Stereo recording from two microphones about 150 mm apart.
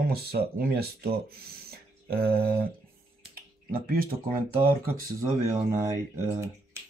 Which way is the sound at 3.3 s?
80° right.